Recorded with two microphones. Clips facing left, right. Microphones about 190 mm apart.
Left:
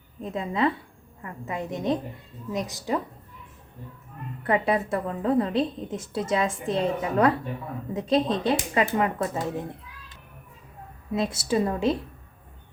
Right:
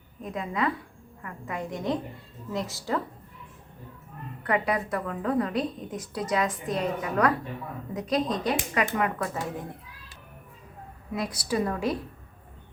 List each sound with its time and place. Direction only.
0.2 s a woman's voice: 25° left (ahead or behind)
4.4 s a woman's voice: 25° left (ahead or behind)
11.1 s a woman's voice: 25° left (ahead or behind)